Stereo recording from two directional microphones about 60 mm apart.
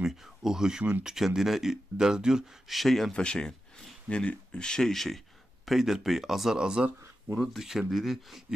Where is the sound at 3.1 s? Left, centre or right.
Centre.